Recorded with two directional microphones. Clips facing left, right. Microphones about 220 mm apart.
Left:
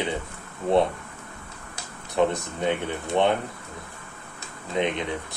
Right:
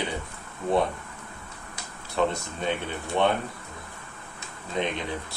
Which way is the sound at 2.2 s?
15° left (ahead or behind).